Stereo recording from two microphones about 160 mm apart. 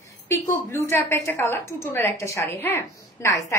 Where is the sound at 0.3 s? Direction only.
15° left (ahead or behind).